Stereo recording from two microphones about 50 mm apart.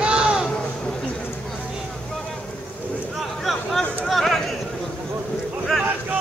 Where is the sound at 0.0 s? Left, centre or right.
Centre.